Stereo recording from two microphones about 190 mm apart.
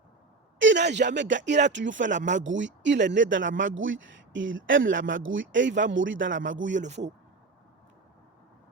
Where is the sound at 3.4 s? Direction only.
45° right (ahead or behind).